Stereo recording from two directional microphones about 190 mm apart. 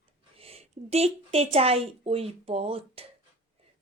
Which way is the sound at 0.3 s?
30° right (ahead or behind).